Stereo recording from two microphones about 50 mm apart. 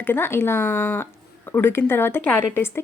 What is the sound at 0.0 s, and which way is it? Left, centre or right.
Speech, left.